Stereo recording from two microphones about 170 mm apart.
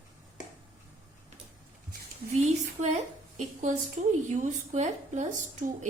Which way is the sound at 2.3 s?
40° right (ahead or behind).